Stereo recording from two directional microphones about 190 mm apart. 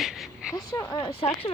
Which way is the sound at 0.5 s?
20° left (ahead or behind).